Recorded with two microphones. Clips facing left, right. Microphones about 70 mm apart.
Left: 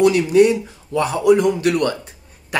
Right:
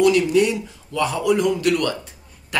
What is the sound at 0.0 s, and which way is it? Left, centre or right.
Speech, left.